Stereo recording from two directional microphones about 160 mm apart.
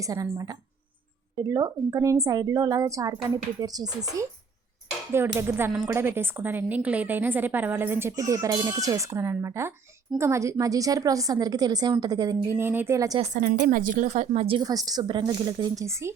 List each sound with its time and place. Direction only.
0.0 s a woman's voice: 20° right (ahead or behind)
13.1 s speech: 45° right (ahead or behind); by 16.1 s 15° right (ahead or behind)